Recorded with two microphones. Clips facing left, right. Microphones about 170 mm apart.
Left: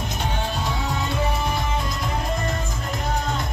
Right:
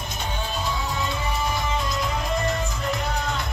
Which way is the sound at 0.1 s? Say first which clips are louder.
Left 1 dB; 65° left (ahead or behind).